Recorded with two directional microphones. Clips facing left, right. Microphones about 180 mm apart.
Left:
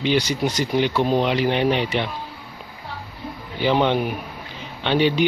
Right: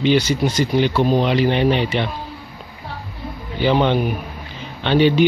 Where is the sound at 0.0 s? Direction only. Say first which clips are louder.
Right 4 dB; 15° left (ahead or behind).